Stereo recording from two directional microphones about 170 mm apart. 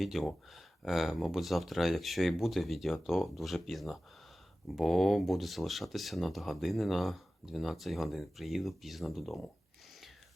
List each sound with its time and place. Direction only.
0.0 s speech: centre (ahead or behind)